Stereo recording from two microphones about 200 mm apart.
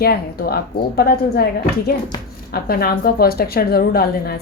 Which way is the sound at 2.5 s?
50° left (ahead or behind).